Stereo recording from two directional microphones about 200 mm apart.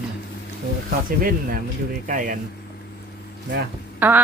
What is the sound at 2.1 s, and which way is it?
Speech, 40° right (ahead or behind).